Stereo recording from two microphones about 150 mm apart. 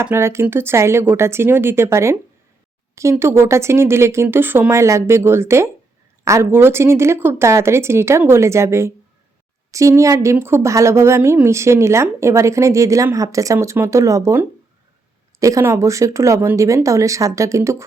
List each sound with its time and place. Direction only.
0.0 s speech: 15° right (ahead or behind)